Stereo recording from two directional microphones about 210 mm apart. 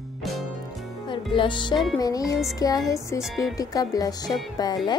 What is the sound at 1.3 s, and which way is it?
A woman's voice, 25° left (ahead or behind).